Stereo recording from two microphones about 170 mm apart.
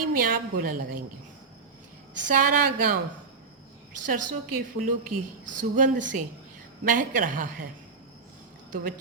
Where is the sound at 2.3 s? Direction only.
55° right (ahead or behind).